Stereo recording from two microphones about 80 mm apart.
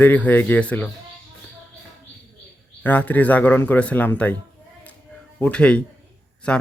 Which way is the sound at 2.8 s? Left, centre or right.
Centre.